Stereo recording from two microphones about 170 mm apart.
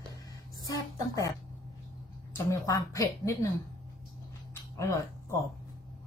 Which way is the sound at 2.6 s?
20° left (ahead or behind).